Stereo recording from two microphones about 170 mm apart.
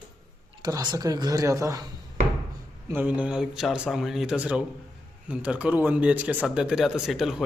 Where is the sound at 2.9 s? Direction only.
10° right (ahead or behind).